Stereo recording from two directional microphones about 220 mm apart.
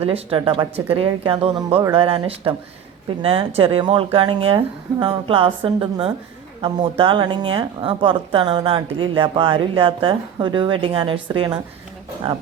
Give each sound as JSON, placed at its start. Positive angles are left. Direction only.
{"t": 0.0, "sound": "a woman's voice", "side_deg": -25}